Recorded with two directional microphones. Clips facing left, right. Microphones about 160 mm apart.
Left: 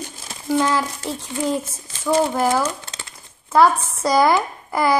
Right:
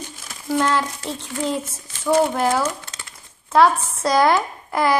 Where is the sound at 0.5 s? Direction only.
5° left (ahead or behind).